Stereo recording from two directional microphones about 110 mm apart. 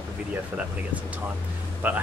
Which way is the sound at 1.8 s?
20° right (ahead or behind).